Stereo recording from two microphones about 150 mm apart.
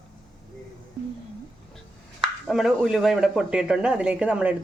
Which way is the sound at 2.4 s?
Centre (ahead or behind).